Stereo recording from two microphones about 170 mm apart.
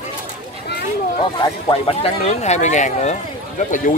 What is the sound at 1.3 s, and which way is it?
Speech, 25° left (ahead or behind).